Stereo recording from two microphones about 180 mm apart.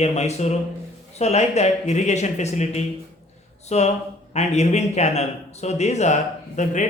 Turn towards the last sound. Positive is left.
turn(degrees=40)  # may be behind; listen again after turning